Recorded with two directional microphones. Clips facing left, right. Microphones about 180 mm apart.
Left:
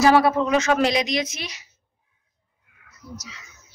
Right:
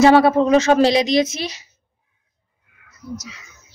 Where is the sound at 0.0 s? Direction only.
25° right (ahead or behind).